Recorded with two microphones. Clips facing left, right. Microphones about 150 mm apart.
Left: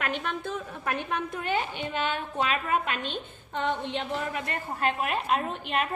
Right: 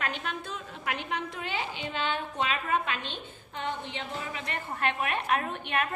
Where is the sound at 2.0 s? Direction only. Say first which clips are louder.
Left 1 dB; 45° left (ahead or behind).